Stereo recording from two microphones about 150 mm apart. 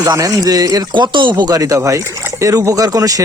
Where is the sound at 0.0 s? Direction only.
25° right (ahead or behind).